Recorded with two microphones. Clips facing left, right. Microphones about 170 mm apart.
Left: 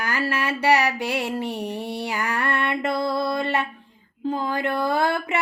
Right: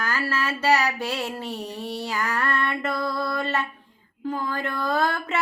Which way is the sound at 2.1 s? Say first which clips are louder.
Even; 15° left (ahead or behind).